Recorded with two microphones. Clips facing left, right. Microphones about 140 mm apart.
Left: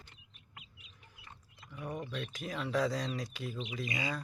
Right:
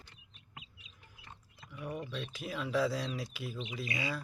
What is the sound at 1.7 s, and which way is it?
Speech, 30° left (ahead or behind).